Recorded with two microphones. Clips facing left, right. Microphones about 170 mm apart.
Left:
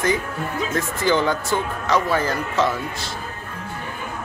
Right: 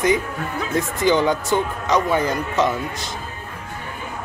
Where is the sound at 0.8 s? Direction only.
15° right (ahead or behind).